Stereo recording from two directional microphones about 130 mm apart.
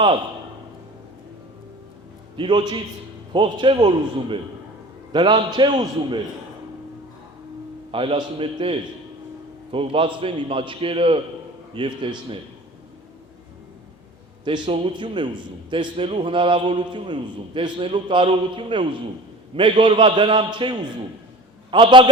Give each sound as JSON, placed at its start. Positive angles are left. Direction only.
{"t": 2.3, "sound": "a man's voice", "side_deg": -40}
{"t": 7.9, "sound": "a man's voice", "side_deg": -45}
{"t": 14.4, "sound": "a man's voice", "side_deg": -35}